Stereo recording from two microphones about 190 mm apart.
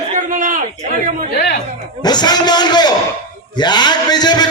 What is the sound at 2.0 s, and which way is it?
A man's voice, 20° left (ahead or behind).